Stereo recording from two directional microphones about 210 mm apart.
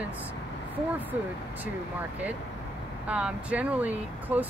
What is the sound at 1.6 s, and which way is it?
Speech, 10° right (ahead or behind).